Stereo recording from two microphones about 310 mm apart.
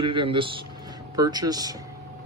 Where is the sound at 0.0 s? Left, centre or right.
Centre.